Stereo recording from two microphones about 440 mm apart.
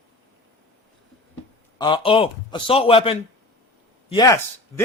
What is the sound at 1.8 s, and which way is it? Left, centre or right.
Speech, centre.